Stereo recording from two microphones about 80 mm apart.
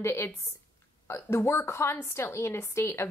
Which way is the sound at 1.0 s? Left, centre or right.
Left.